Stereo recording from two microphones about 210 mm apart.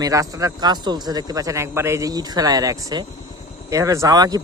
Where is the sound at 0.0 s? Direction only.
15° right (ahead or behind).